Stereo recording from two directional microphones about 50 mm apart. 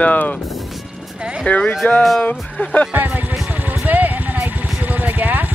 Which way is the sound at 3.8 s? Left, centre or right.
Right.